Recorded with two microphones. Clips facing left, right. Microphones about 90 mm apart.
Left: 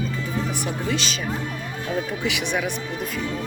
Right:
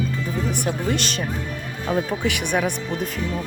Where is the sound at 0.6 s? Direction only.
55° right (ahead or behind).